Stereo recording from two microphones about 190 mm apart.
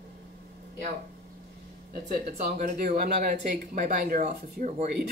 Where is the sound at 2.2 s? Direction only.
45° right (ahead or behind).